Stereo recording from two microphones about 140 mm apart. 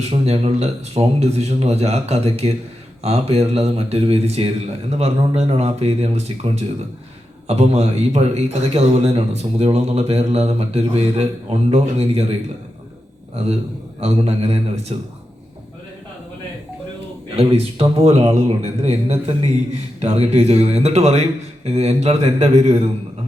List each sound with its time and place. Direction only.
0.0 s a man's voice: 45° right (ahead or behind)
13.3 s a man's voice: 45° right (ahead or behind)
17.3 s a man's voice: 45° right (ahead or behind)